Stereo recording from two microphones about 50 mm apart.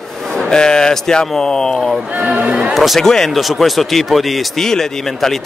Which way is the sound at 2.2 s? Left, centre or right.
Right.